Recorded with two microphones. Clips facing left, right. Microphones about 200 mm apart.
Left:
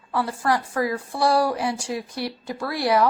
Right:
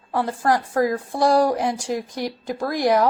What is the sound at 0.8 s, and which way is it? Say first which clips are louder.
Speech: right 3 dB; 45° right (ahead or behind).